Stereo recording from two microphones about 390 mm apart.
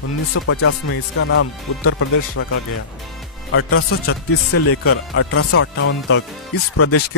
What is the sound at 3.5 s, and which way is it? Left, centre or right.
Speech, left.